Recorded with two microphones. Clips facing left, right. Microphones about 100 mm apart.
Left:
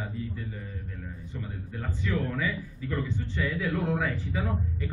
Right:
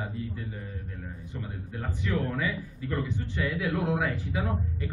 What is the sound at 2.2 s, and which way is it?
Speech, 30° right (ahead or behind).